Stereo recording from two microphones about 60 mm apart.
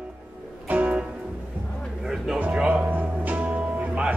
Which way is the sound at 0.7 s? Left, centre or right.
Right.